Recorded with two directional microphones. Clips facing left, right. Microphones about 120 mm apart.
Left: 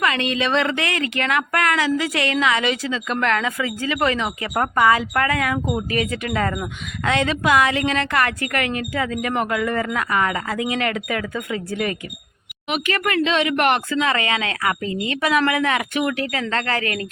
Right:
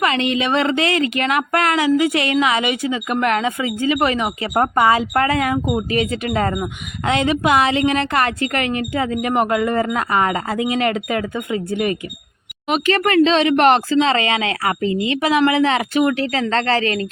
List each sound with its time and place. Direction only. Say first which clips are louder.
0.0 s speech: right 3 dB; 20° right (ahead or behind)
12.6 s speech: right 5 dB; 35° right (ahead or behind)